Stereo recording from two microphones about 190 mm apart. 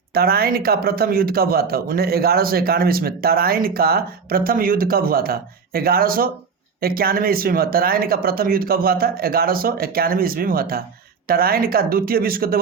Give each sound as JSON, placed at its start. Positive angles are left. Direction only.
{"t": 0.1, "sound": "speech", "side_deg": -55}